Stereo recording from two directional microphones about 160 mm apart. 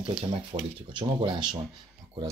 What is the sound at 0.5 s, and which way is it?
Speech, 35° right (ahead or behind).